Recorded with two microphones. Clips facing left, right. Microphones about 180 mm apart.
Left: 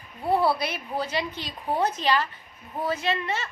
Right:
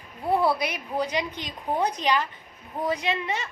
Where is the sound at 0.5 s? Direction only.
15° right (ahead or behind).